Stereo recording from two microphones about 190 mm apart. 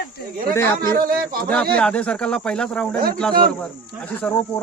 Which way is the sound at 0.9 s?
50° right (ahead or behind).